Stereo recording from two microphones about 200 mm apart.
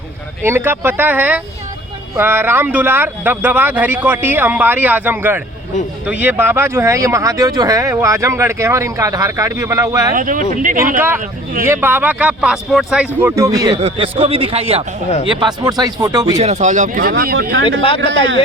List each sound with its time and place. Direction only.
0.4 s speech: 10° right (ahead or behind)
10.2 s speech: 45° right (ahead or behind)
11.6 s speech: 10° right (ahead or behind)
13.8 s a man's voice: 30° right (ahead or behind)
16.4 s speech: 35° right (ahead or behind); by 17.8 s 70° right (ahead or behind)